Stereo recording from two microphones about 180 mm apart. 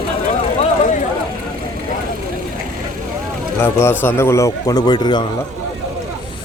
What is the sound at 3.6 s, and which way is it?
Speech, 15° left (ahead or behind).